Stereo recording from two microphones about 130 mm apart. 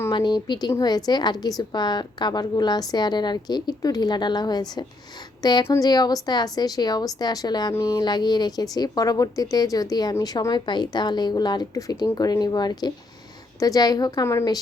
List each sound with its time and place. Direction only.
0.1 s speech: 35° left (ahead or behind)
5.6 s a woman's voice: 20° left (ahead or behind)
5.9 s speech: 30° left (ahead or behind)
7.7 s a woman's voice: 20° left (ahead or behind)
7.9 s a woman's voice: 35° left (ahead or behind)